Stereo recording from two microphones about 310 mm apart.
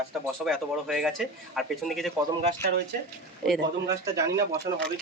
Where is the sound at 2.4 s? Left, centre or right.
Right.